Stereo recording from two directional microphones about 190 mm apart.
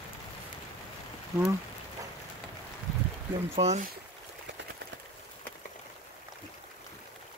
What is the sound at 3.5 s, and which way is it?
Speech, 35° right (ahead or behind).